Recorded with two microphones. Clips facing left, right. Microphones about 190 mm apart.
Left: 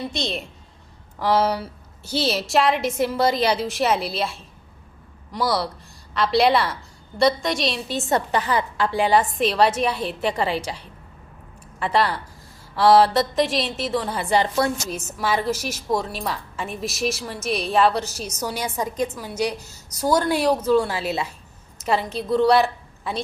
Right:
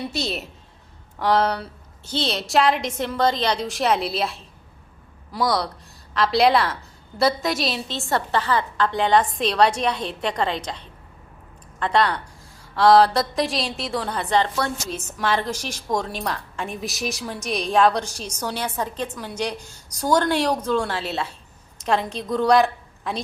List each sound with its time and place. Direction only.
0.1 s a woman's voice: 5° right (ahead or behind)
7.9 s a woman's voice: 20° left (ahead or behind); by 23.2 s centre (ahead or behind)